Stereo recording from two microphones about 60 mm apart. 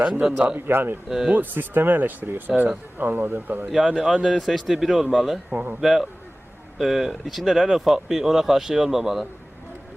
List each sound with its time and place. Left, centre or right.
0.2 s a man's voice: centre
0.7 s speech: right
3.7 s speech: centre
5.5 s speech: right
5.8 s speech: centre